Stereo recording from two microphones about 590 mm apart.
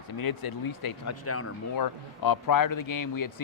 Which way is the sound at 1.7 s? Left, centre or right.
Left.